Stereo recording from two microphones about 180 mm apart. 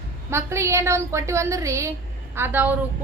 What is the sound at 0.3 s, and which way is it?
A woman's voice, 15° right (ahead or behind).